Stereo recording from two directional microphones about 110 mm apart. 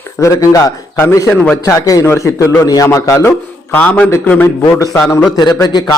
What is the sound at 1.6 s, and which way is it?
A man's voice, 30° left (ahead or behind).